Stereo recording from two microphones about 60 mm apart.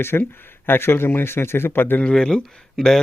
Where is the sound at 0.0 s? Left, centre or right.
Left.